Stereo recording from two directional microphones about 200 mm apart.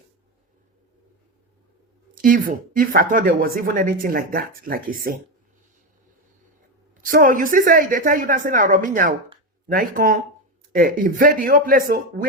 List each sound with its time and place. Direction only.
2.1 s speech: 45° right (ahead or behind)
7.0 s speech: 45° right (ahead or behind)